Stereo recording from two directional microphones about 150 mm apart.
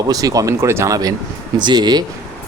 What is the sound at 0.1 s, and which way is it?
Speech, 25° right (ahead or behind).